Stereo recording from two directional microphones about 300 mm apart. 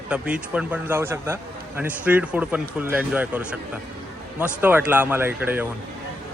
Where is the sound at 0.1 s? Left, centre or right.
Centre.